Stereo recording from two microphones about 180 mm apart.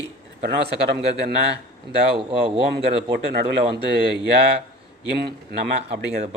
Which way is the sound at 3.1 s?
65° right (ahead or behind).